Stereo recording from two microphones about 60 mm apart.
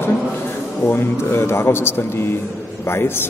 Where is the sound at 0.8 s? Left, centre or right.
Left.